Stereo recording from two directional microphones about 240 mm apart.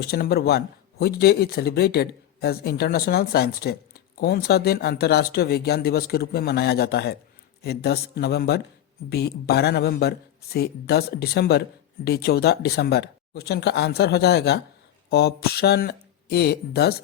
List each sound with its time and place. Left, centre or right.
0.0 s speech: left